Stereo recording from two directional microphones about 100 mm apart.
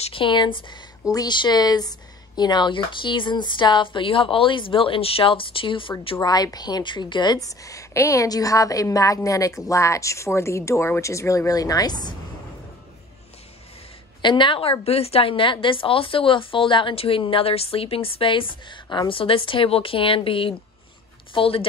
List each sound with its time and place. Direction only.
0.0 s a woman's voice: 60° left (ahead or behind)
1.0 s a woman's voice: 40° left (ahead or behind); by 6.1 s 60° left (ahead or behind)
6.2 s a woman's voice: 40° left (ahead or behind)
14.2 s a woman's voice: 55° left (ahead or behind)